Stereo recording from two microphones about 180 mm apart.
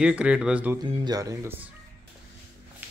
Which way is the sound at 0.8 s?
25° right (ahead or behind).